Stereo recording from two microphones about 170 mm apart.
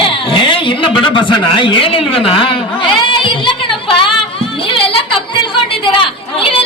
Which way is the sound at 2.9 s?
30° left (ahead or behind).